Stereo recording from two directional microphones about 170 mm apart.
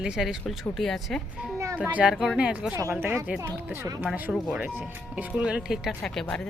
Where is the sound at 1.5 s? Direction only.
20° right (ahead or behind).